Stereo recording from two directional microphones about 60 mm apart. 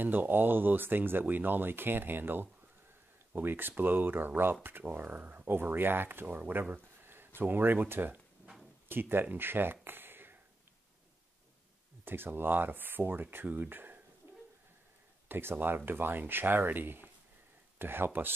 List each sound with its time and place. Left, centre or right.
0.0 s speech: right
12.0 s speech: right
14.2 s a sound: right
15.2 s speech: right